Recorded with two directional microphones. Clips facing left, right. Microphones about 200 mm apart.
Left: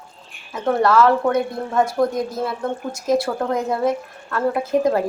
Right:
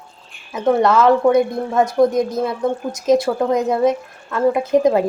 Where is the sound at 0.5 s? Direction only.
20° right (ahead or behind).